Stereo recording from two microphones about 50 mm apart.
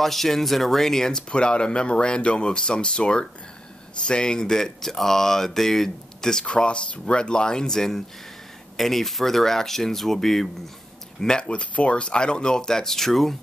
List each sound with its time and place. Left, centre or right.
0.0 s speech: centre
6.4 s speech: left; by 13.4 s centre